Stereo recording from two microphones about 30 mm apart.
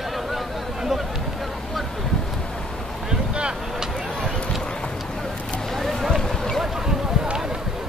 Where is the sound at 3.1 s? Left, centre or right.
Right.